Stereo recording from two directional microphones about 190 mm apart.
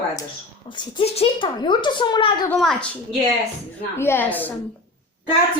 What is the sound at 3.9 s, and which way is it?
Speech, 10° left (ahead or behind).